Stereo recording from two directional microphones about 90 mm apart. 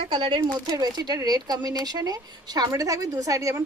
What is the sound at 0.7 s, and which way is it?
Speech, 45° right (ahead or behind).